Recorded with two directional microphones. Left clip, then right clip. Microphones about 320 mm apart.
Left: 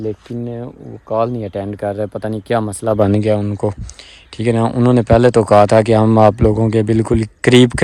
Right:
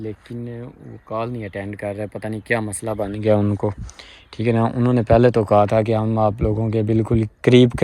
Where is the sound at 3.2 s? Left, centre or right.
Centre.